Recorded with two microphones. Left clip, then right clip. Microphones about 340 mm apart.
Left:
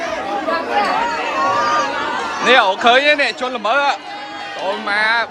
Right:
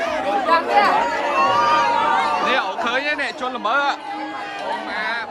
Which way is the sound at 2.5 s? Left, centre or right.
Centre.